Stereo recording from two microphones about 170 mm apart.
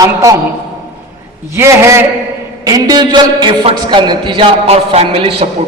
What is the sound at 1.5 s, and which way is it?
A man's voice, 15° right (ahead or behind).